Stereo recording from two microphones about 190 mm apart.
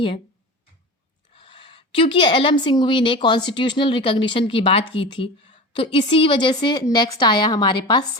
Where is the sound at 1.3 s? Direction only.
25° left (ahead or behind).